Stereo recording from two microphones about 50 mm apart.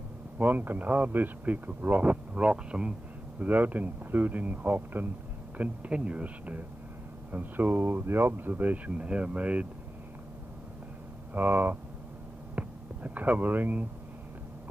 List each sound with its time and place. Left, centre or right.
0.4 s speech: right
3.3 s speech: right
5.6 s speech: right
11.3 s speech: right